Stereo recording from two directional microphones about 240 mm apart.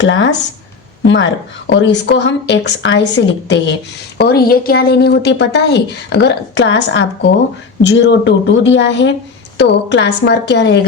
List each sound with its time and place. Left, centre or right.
0.0 s a woman's voice: left